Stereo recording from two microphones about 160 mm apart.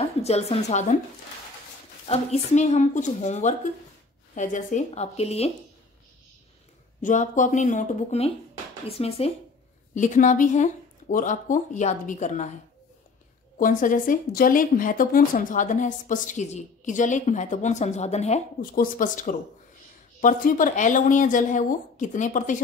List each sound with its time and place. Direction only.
0.0 s a woman's voice: 40° left (ahead or behind)
2.0 s a woman's voice: 45° left (ahead or behind)
7.0 s a woman's voice: 55° left (ahead or behind)
9.9 s a woman's voice: 50° left (ahead or behind)
13.6 s a woman's voice: 55° left (ahead or behind)
18.6 s a woman's voice: 60° left (ahead or behind)